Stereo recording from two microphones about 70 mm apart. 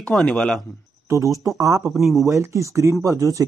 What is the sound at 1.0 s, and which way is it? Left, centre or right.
Speech, right.